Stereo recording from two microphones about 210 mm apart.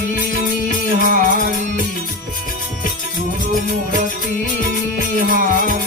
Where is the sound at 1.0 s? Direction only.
40° right (ahead or behind).